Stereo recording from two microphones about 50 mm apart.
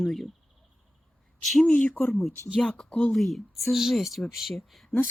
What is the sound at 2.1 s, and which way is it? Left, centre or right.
Speech, centre.